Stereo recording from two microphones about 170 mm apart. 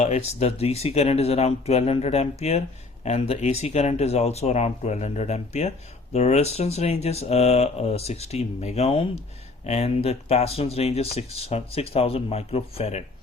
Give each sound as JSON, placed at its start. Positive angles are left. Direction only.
{"t": 0.0, "sound": "speech", "side_deg": 40}